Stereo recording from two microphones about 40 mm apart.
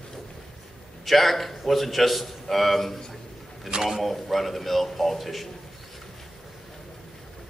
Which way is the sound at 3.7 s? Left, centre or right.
Centre.